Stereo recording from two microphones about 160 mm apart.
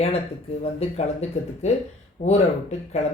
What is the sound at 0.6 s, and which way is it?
Speech, 40° left (ahead or behind).